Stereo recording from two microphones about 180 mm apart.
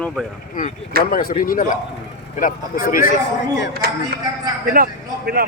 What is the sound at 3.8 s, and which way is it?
A man's voice, 60° right (ahead or behind).